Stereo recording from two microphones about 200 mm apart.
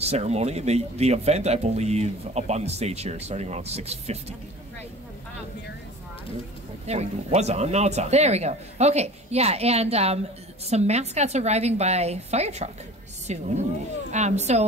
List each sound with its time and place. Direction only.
0.0 s speech: 30° right (ahead or behind)
6.9 s speech: 35° right (ahead or behind)